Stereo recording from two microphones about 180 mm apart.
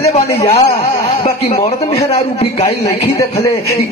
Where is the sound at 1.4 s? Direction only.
35° left (ahead or behind).